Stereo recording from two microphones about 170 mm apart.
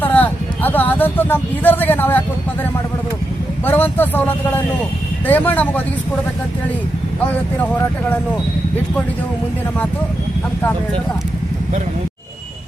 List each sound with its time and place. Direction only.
0.0 s speech: 10° left (ahead or behind)
3.7 s speech: 10° left (ahead or behind)